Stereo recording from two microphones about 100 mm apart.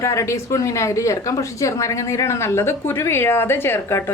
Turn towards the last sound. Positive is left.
turn(degrees=25)  # may be behind; listen again after turning